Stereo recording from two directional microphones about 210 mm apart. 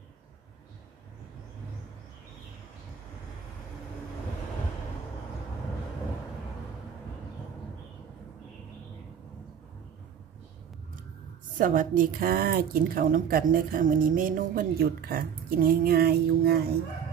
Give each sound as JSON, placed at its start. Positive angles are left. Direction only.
{"t": 11.5, "sound": "a woman's voice", "side_deg": -40}